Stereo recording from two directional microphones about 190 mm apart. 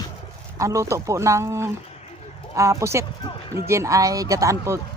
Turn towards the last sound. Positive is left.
turn(degrees=-15)  # may be behind; listen again after turning